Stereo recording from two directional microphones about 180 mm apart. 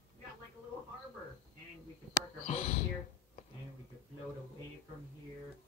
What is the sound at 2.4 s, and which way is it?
Whispering, 40° left (ahead or behind).